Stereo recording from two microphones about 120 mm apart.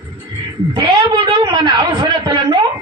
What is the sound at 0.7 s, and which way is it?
A man's voice, 45° right (ahead or behind).